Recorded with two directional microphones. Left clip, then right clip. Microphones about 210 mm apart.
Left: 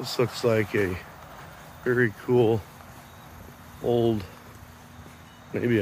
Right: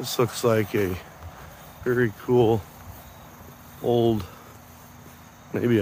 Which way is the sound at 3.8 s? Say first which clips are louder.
Right 2 dB; 25° right (ahead or behind).